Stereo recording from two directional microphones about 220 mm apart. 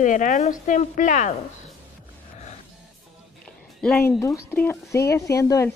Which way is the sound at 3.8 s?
10° left (ahead or behind).